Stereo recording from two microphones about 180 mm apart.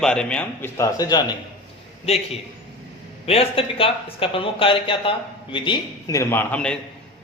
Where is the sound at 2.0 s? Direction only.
35° left (ahead or behind); by 6.7 s 5° left (ahead or behind).